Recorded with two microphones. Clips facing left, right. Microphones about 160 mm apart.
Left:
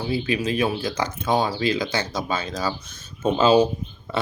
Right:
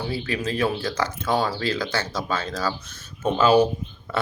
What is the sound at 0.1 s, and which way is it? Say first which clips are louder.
Speech: left 3 dB; 15° left (ahead or behind).